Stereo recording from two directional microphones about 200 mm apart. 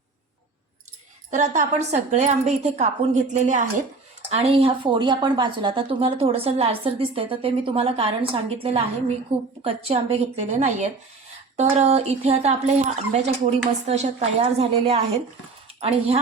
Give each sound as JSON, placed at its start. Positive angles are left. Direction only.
{"t": 1.3, "sound": "speech", "side_deg": -35}